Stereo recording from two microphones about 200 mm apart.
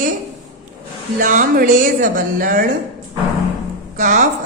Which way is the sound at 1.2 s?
40° right (ahead or behind).